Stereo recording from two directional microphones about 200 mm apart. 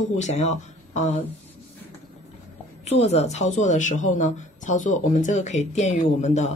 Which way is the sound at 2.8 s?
35° left (ahead or behind).